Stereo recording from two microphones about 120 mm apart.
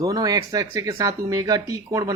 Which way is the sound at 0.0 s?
30° right (ahead or behind).